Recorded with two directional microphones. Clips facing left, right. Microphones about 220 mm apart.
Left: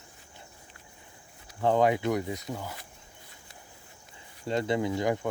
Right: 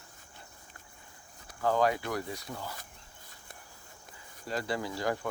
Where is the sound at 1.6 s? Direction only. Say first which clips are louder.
Left 4 dB; 25° left (ahead or behind).